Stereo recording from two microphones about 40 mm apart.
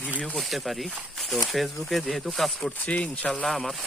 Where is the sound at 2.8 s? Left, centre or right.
Left.